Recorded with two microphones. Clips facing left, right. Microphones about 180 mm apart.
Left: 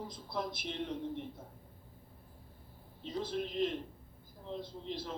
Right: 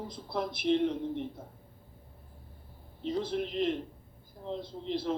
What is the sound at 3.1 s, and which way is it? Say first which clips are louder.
Speech: right 5 dB; 65° right (ahead or behind).